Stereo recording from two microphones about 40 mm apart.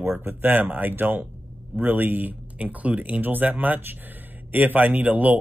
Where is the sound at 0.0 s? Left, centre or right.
Right.